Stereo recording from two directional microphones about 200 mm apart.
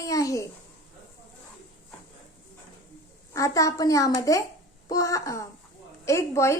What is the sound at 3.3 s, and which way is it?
Speech, 15° left (ahead or behind).